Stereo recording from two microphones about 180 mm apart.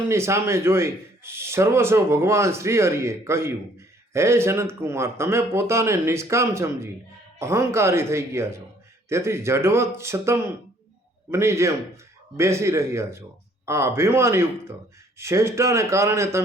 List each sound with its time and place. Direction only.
0.1 s a man's voice: 15° right (ahead or behind)